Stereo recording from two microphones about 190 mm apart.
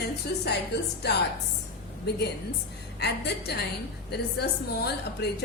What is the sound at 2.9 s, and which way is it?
A woman's voice, 60° left (ahead or behind).